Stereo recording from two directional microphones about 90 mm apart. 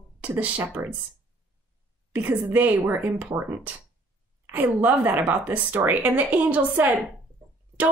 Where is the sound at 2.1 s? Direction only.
20° right (ahead or behind).